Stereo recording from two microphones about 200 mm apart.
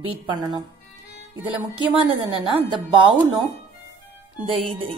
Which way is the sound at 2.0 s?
25° right (ahead or behind).